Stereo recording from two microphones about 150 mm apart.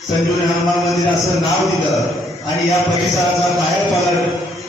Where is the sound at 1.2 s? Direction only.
Centre (ahead or behind).